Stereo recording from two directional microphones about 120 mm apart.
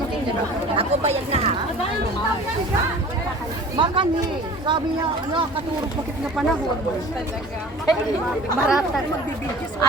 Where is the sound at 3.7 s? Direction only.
45° right (ahead or behind).